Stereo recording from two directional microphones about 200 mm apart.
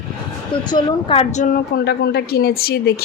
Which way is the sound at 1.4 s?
50° left (ahead or behind).